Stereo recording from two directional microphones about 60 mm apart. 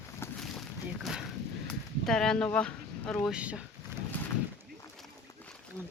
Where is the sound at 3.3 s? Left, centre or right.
Right.